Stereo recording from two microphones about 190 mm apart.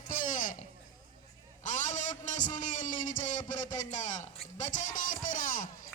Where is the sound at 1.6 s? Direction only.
40° left (ahead or behind).